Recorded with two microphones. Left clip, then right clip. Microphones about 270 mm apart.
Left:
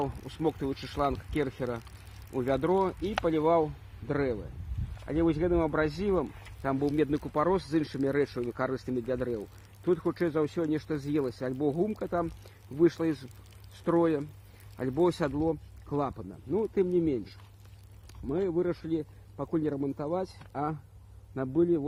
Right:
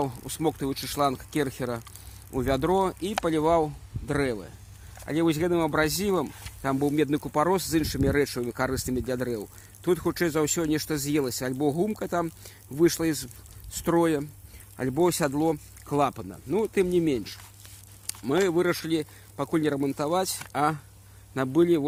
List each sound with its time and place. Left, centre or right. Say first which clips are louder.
0.0 s speech: right 3 dB; right
18.0 s a sound: right 8 dB; right
18.3 s speech: right 6 dB; right